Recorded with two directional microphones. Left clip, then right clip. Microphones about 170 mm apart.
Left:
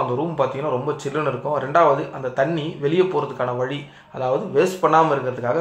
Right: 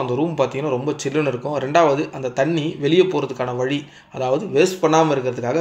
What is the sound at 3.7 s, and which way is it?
Speech, 30° right (ahead or behind).